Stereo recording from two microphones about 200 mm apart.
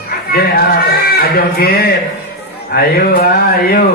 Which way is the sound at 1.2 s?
50° left (ahead or behind).